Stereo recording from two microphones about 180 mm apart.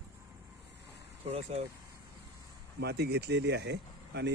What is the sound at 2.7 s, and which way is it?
Speech, 65° right (ahead or behind).